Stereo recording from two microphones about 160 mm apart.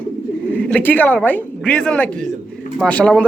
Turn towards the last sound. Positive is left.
turn(degrees=5)  # may be behind; listen again after turning